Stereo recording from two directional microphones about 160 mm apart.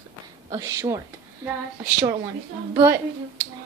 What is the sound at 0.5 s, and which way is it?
A woman's voice, 20° right (ahead or behind).